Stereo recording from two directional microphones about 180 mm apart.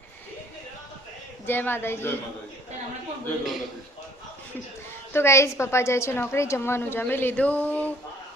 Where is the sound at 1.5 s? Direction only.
10° left (ahead or behind).